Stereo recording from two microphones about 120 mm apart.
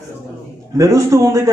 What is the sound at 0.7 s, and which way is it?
Speech, 25° right (ahead or behind).